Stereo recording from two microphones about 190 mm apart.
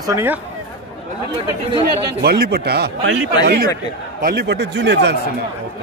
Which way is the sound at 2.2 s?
55° right (ahead or behind).